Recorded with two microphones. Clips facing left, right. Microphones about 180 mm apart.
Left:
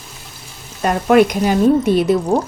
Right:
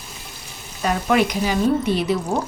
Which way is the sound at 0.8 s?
50° left (ahead or behind).